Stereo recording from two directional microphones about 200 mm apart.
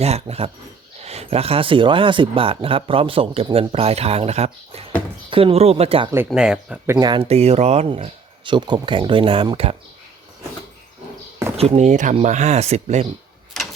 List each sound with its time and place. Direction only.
0.0 s speech: 30° right (ahead or behind)
6.1 s speech: 10° right (ahead or behind)
6.9 s speech: 20° right (ahead or behind)
11.5 s speech: 30° right (ahead or behind)